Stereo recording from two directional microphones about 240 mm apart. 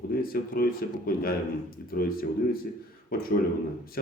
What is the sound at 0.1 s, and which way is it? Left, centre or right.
Speech, left.